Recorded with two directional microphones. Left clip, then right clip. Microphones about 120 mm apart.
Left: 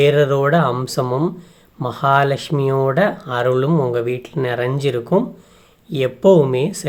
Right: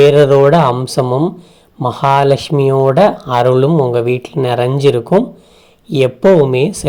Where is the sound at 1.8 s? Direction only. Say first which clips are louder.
Right 5 dB; 30° right (ahead or behind).